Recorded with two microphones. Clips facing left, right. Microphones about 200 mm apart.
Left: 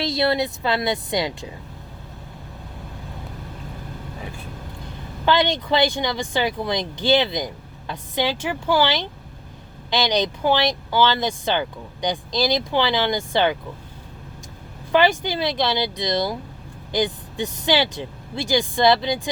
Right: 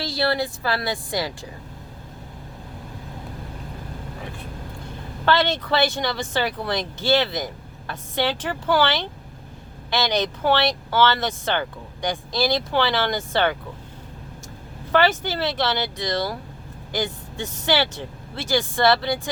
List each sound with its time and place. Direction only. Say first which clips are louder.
0.0 s a woman's voice: left 3 dB; 20° left (ahead or behind)
5.2 s speech: left 1 dB; 15° left (ahead or behind)
14.9 s speech: left 2 dB; 15° left (ahead or behind)